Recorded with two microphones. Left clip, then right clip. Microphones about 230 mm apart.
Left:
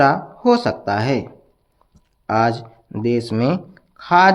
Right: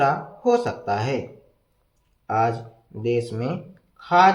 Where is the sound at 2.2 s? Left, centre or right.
Left.